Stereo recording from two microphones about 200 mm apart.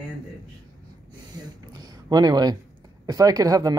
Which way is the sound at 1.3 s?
20° right (ahead or behind).